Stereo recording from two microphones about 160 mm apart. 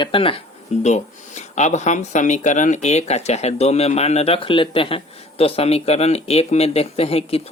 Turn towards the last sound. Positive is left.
turn(degrees=40)  # may be behind; listen again after turning